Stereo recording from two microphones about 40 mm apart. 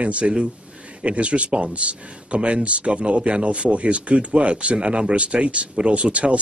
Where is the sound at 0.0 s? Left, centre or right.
Right.